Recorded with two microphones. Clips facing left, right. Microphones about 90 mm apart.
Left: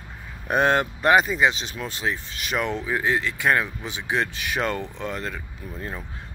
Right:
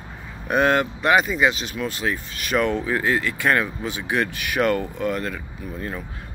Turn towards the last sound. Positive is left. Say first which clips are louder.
# right 5 dB
turn(degrees=25)  # may be behind; listen again after turning